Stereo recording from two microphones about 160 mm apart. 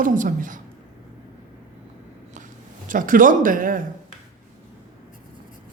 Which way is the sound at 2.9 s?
60° right (ahead or behind).